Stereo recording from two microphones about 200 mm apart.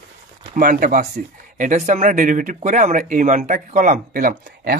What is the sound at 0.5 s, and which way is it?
Speech, 45° right (ahead or behind).